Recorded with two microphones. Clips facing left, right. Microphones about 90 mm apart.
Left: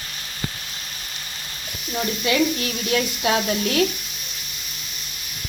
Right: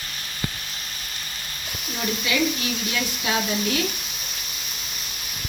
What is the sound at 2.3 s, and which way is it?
Speech, 55° left (ahead or behind).